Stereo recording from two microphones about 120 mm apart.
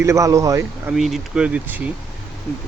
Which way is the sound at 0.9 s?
Centre (ahead or behind).